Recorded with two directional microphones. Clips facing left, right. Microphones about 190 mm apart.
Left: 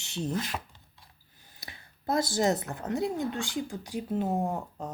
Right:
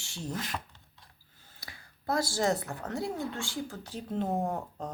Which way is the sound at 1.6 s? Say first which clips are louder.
Left 2 dB; 20° left (ahead or behind).